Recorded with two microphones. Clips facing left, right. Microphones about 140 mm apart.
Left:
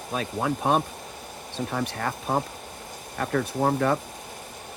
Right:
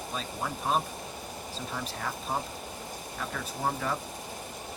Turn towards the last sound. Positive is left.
turn(degrees=65)  # may be behind; listen again after turning